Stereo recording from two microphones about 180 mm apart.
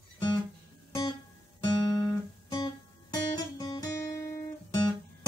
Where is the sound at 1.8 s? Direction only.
20° left (ahead or behind).